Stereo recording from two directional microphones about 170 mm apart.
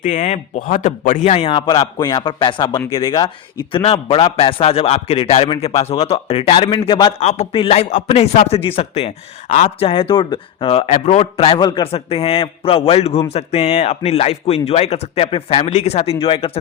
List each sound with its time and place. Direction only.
0.0 s a man's voice: 45° left (ahead or behind)